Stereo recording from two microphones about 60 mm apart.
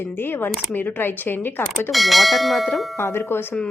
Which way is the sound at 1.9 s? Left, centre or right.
Centre.